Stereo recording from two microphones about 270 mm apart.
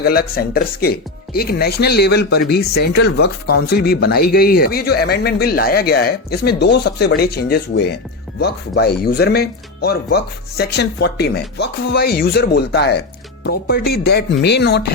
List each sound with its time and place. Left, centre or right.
0.0 s speech: left